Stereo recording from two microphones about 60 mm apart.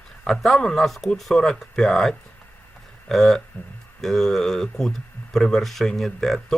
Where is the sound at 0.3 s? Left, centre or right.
Centre.